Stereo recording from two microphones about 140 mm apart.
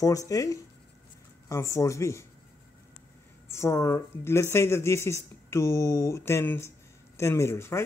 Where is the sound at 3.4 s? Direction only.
20° left (ahead or behind).